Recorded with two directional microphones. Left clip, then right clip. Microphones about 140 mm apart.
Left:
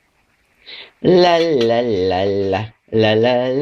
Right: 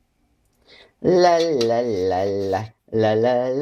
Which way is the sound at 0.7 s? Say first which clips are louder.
Left 4 dB; 5° left (ahead or behind).